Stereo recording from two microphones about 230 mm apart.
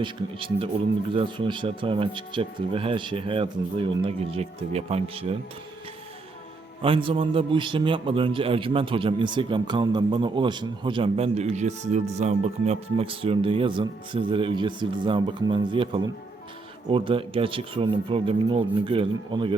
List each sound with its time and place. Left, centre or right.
0.0 s a man's voice: right
6.8 s a man's voice: right